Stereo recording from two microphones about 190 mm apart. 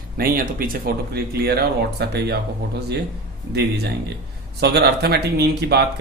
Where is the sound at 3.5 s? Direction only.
60° right (ahead or behind).